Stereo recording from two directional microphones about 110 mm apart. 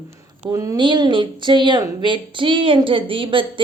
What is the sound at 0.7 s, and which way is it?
A woman's voice, 45° right (ahead or behind).